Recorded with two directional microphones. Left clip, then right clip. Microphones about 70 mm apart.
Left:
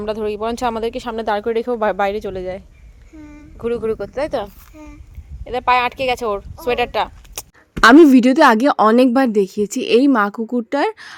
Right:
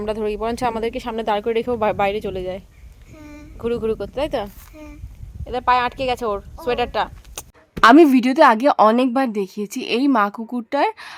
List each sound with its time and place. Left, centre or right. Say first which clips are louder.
0.0 s speech: left 1 dB; centre
5.5 s speech: left 2 dB; left
7.9 s speech: left 3 dB; left